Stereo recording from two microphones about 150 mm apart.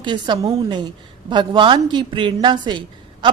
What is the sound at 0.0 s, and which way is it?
A woman's voice, 30° right (ahead or behind).